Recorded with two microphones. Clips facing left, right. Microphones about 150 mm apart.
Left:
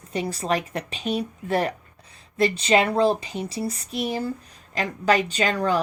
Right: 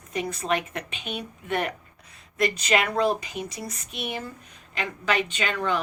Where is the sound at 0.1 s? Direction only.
35° left (ahead or behind).